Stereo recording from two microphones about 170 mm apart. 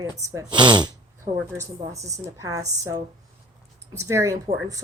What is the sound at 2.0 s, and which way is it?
Speech, 20° right (ahead or behind).